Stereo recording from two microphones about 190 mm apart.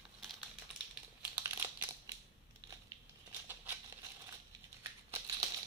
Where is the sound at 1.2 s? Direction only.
10° right (ahead or behind).